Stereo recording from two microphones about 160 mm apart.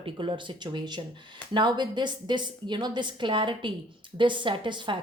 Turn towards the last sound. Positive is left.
turn(degrees=-30)  # may be behind; listen again after turning